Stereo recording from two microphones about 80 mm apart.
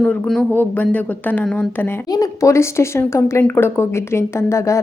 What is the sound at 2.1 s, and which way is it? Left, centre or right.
Speech, left.